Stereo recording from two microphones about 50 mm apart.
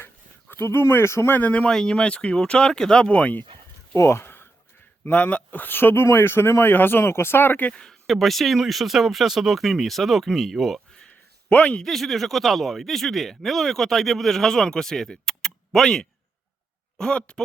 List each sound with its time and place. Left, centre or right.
0.5 s speech: left
1.3 s speech: left
1.7 s speech: centre
3.9 s speech: left
4.2 s a sound: left
5.0 s speech: left
7.7 s a sound: centre
8.1 s speech: centre
11.4 s a man's voice: left
11.8 s speech: centre
17.0 s speech: centre